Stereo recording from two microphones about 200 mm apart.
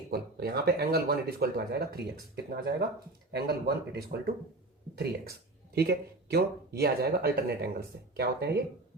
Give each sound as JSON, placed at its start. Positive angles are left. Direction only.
{"t": 0.1, "sound": "speech", "side_deg": -50}
{"t": 5.7, "sound": "speech", "side_deg": -55}